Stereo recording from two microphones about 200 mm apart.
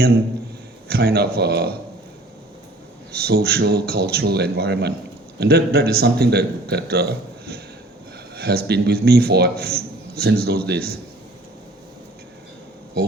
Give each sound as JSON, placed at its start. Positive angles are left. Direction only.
{"t": 0.9, "sound": "a man's voice", "side_deg": -50}
{"t": 3.1, "sound": "a man's voice", "side_deg": -50}